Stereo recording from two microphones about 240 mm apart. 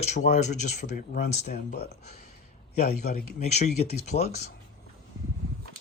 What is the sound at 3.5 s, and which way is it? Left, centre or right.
Speech, left.